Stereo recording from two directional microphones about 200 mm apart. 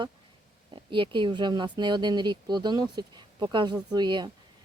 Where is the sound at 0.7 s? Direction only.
25° right (ahead or behind).